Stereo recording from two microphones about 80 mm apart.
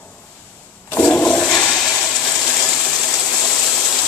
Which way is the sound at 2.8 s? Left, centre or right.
Centre.